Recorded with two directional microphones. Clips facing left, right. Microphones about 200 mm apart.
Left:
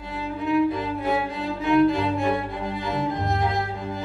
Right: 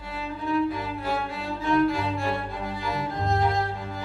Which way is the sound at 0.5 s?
20° left (ahead or behind).